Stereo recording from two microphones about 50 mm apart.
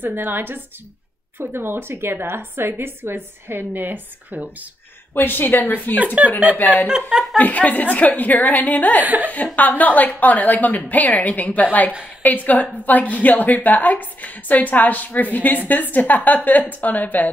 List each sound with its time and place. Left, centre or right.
0.0 s a woman's voice: right
5.1 s a woman's voice: left
6.2 s speech: right
6.5 s a woman's voice: left
9.0 s speech: right
9.3 s a woman's voice: left